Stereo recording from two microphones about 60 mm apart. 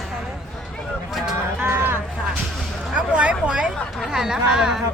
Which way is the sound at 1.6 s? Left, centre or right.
Right.